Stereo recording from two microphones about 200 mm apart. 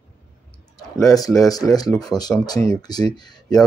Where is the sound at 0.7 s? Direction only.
15° left (ahead or behind).